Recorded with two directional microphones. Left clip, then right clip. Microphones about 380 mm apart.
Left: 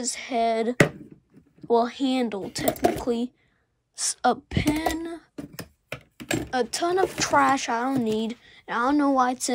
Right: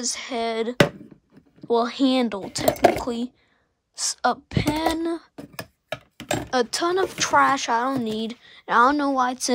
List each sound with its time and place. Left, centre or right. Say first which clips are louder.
0.0 s speech: left 2 dB; centre
2.7 s speech: right 6 dB; centre
3.0 s speech: left 1 dB; centre
6.3 s speech: right 3 dB; centre